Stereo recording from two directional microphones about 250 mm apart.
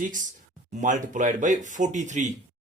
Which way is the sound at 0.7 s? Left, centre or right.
Right.